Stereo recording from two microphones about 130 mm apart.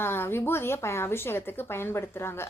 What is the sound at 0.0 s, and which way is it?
Speech, 20° left (ahead or behind).